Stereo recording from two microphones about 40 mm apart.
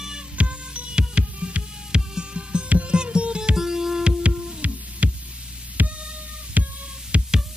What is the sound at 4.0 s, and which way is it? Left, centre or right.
Music, right.